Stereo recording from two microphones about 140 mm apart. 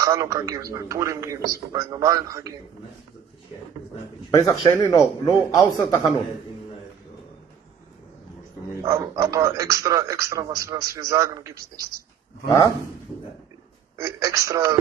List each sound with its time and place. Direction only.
0.0 s a man's voice: 25° right (ahead or behind)
4.3 s a man's voice: 25° left (ahead or behind)
8.8 s a man's voice: 20° right (ahead or behind)
13.9 s a man's voice: 20° right (ahead or behind)